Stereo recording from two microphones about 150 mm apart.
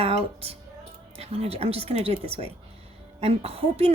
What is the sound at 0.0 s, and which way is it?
A woman's voice, 40° right (ahead or behind).